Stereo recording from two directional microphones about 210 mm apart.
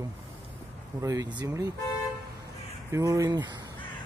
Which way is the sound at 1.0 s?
15° right (ahead or behind).